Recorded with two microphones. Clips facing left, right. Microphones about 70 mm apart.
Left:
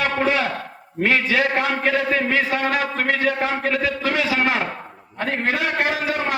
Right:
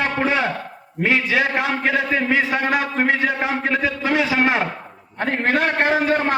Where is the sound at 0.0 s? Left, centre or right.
Right.